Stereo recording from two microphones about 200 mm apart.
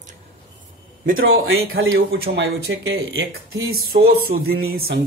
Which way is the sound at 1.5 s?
80° right.